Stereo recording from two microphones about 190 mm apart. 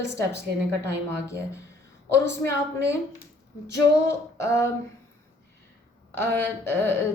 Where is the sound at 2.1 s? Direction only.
15° left (ahead or behind).